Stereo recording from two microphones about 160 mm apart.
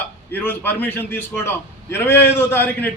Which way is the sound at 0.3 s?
10° left (ahead or behind).